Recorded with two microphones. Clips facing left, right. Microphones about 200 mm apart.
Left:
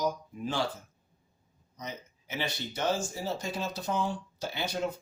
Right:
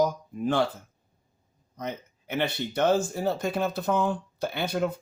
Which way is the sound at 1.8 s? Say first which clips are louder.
Right 7 dB; 60° right (ahead or behind).